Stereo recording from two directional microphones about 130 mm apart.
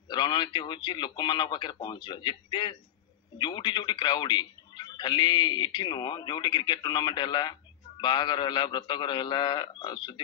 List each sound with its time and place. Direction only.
0.1 s a man's voice: 35° left (ahead or behind)